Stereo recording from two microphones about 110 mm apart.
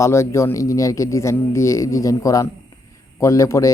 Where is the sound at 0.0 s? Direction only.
25° left (ahead or behind).